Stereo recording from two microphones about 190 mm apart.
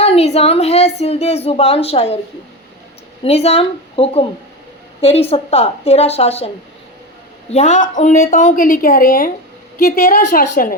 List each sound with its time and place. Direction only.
0.0 s a woman's voice: 35° left (ahead or behind)
3.2 s a woman's voice: 35° left (ahead or behind)
7.5 s a woman's voice: 35° left (ahead or behind)